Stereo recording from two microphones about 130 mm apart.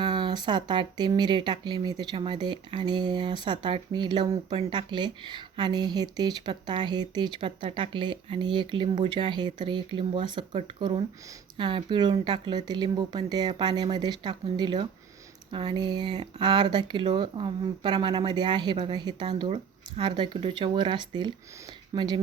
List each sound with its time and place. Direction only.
0.0 s speech: 35° right (ahead or behind)